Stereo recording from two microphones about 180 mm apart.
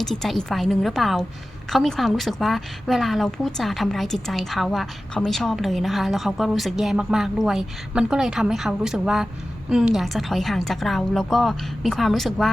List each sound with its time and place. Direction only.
0.0 s a woman's voice: centre (ahead or behind)